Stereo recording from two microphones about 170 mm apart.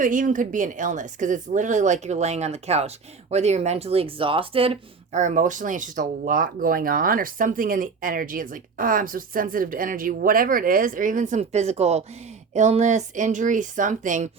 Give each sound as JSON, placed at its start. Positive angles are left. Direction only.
{"t": 0.0, "sound": "speech", "side_deg": -50}